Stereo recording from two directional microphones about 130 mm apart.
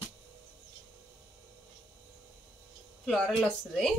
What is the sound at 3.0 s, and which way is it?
Speech, centre (ahead or behind).